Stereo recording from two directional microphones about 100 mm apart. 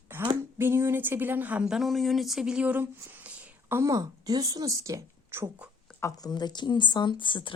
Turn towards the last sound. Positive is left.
turn(degrees=50)  # may be behind; listen again after turning